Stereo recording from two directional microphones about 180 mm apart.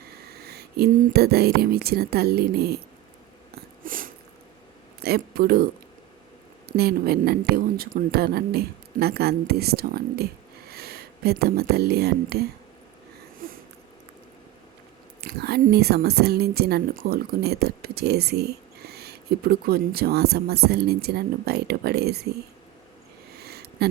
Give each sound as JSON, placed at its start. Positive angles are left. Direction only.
{"t": 0.3, "sound": "speech", "side_deg": -60}
{"t": 3.8, "sound": "sneeze", "side_deg": -50}
{"t": 5.0, "sound": "speech", "side_deg": -60}
{"t": 6.7, "sound": "a woman's voice", "side_deg": -60}
{"t": 13.4, "sound": "sniff", "side_deg": -50}
{"t": 15.2, "sound": "a woman's voice", "side_deg": -65}
{"t": 23.4, "sound": "a sound", "side_deg": -60}